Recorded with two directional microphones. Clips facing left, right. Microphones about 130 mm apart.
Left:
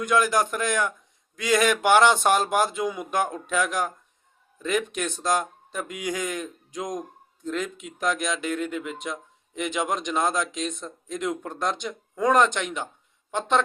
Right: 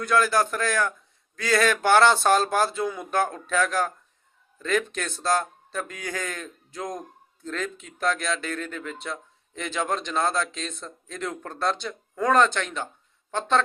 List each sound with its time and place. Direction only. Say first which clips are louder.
0.0 s speech: even; 15° left (ahead or behind)